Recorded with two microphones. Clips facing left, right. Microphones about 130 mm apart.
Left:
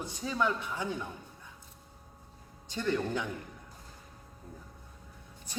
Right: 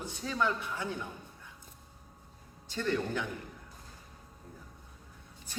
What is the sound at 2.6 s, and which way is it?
Speech, 15° left (ahead or behind).